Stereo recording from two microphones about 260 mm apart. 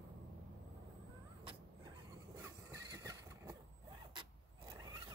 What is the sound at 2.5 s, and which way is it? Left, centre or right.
Neigh, centre.